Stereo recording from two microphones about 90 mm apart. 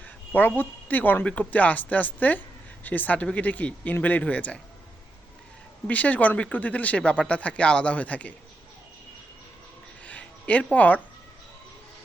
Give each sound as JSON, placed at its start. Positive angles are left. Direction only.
{"t": 0.0, "sound": "speech", "side_deg": 20}
{"t": 5.9, "sound": "speech", "side_deg": 15}
{"t": 10.0, "sound": "a sound", "side_deg": 15}